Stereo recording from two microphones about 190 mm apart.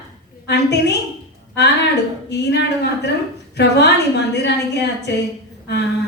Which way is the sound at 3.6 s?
65° left (ahead or behind).